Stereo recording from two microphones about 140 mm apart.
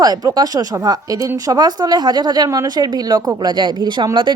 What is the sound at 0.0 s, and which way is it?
Speech, 30° right (ahead or behind).